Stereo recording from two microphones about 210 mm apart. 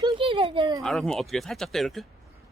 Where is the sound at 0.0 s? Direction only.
25° right (ahead or behind).